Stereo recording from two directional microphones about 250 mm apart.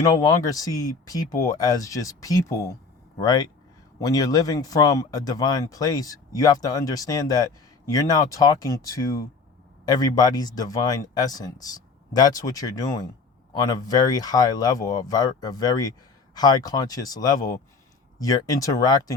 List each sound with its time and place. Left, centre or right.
0.0 s speech: centre